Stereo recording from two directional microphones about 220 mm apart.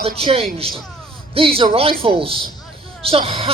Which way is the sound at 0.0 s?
25° right (ahead or behind).